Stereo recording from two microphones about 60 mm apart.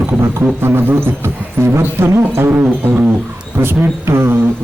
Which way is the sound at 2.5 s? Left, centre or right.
Right.